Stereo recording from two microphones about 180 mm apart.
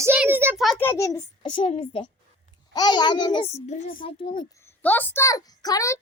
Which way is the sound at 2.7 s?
25° left (ahead or behind).